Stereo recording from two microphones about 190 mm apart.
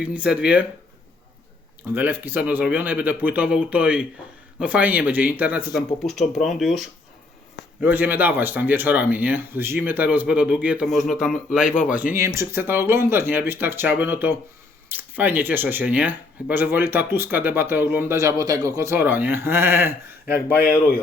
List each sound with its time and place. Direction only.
0.0 s speech: 5° right (ahead or behind)
1.9 s speech: 10° right (ahead or behind)
11.6 s a man's voice: 45° left (ahead or behind)
12.1 s speech: 15° right (ahead or behind)